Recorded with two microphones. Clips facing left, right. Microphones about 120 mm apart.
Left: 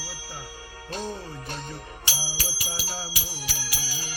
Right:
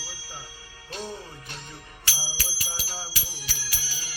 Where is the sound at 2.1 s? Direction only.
15° left (ahead or behind).